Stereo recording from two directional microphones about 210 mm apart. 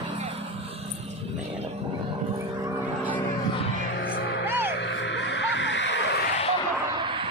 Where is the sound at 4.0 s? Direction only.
45° left (ahead or behind).